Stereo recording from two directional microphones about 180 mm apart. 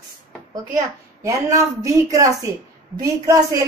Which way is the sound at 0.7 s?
20° right (ahead or behind).